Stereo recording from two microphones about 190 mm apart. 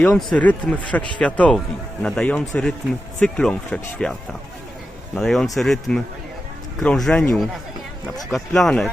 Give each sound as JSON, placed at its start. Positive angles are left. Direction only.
{"t": 0.0, "sound": "speech", "side_deg": 5}